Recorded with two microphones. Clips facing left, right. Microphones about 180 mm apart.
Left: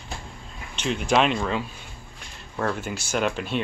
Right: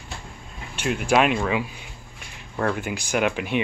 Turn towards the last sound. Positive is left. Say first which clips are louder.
# right 2 dB
turn(degrees=-15)  # may be behind; listen again after turning